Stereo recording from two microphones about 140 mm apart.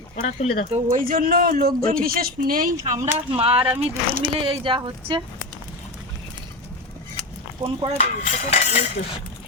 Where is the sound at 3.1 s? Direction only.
45° right (ahead or behind).